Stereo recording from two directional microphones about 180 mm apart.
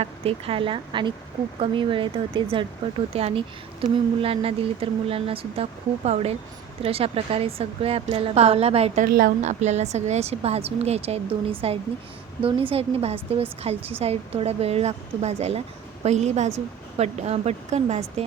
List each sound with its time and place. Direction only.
0.0 s speech: 35° right (ahead or behind)
9.0 s a woman's voice: 55° right (ahead or behind)
9.4 s speech: 40° right (ahead or behind)